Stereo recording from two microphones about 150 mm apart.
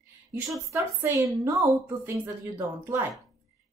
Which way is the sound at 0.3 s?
20° right (ahead or behind).